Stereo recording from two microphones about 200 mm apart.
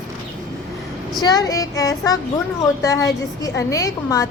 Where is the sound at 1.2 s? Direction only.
20° left (ahead or behind).